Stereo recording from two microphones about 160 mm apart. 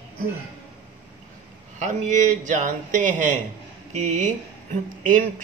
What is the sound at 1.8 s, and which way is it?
A man's voice, 50° right (ahead or behind).